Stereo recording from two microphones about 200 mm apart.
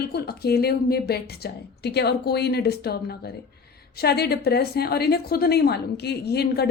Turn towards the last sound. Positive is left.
turn(degrees=55)  # may be behind; listen again after turning